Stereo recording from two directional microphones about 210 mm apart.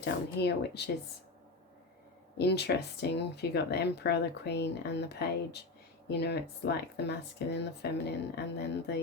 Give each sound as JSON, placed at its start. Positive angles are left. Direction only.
{"t": 0.0, "sound": "speech", "side_deg": 50}
{"t": 2.4, "sound": "speech", "side_deg": 50}